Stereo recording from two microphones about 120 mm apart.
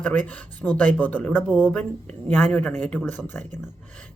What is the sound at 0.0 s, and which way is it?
Speech, 15° left (ahead or behind).